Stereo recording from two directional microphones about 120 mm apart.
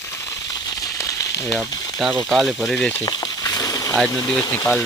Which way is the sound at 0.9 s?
30° left (ahead or behind).